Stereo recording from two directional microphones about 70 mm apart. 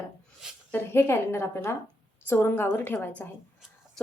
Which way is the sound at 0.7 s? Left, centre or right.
Left.